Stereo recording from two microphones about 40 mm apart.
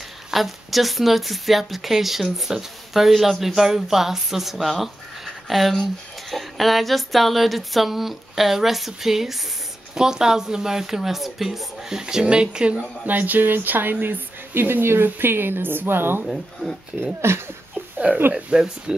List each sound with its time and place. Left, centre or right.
0.3 s a woman's voice: centre
11.9 s speech: centre
13.0 s speech: right
14.0 s speech: right
15.1 s a woman's voice: right
16.6 s speech: left
17.2 s a sound: right
17.9 s speech: right
18.3 s speech: centre